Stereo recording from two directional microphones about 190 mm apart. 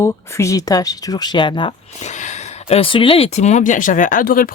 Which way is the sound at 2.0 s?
40° left (ahead or behind).